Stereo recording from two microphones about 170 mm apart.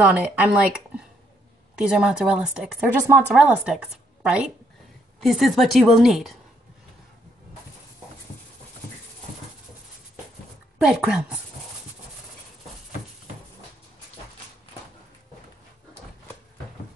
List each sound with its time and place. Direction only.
0.1 s a woman's voice: 10° right (ahead or behind)
10.8 s a woman's voice: 5° right (ahead or behind)